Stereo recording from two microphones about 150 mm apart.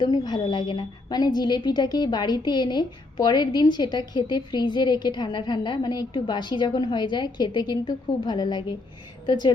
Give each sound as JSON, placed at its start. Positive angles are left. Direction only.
{"t": 0.0, "sound": "a woman's voice", "side_deg": 30}